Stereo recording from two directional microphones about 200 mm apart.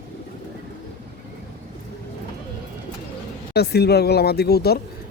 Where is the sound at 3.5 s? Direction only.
55° left (ahead or behind).